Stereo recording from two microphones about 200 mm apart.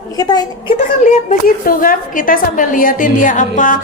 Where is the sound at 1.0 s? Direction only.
40° left (ahead or behind).